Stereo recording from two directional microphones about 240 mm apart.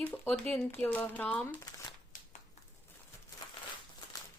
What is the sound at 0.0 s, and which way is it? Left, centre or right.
Speech, centre.